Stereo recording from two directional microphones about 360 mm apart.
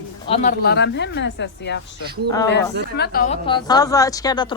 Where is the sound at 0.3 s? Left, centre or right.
Centre.